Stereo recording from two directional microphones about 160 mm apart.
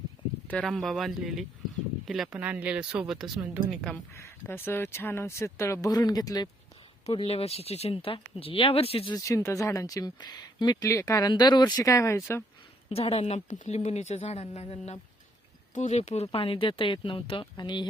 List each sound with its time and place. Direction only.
0.4 s speech: 5° left (ahead or behind)
4.1 s speech: 15° left (ahead or behind)
7.0 s speech: 35° left (ahead or behind)
9.1 s speech: 20° left (ahead or behind)
12.9 s speech: 35° left (ahead or behind)